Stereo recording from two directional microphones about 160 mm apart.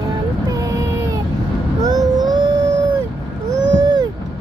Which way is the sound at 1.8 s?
25° right (ahead or behind).